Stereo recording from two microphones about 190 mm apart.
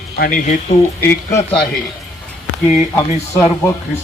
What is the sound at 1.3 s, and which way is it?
Speech, 10° left (ahead or behind).